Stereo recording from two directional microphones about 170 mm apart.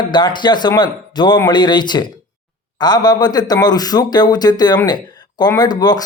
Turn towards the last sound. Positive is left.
turn(degrees=25)  # may be behind; listen again after turning